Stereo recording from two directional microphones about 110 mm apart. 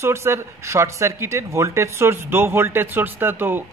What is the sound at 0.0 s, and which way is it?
Speech, 25° right (ahead or behind).